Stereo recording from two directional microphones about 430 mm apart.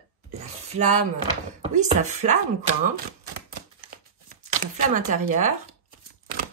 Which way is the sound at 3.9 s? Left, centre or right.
Centre.